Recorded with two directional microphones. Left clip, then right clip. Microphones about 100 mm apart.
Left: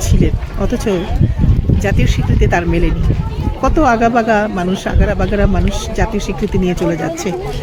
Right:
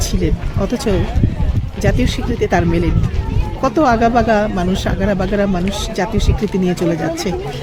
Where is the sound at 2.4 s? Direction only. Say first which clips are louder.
Left 1 dB; 20° right (ahead or behind).